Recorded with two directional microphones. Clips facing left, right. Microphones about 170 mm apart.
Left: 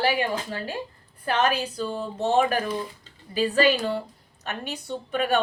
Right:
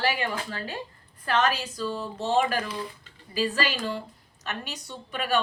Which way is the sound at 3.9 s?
55° left (ahead or behind).